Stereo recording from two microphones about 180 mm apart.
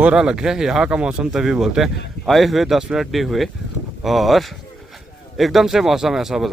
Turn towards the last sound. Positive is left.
turn(degrees=0)  # may be behind; listen again after turning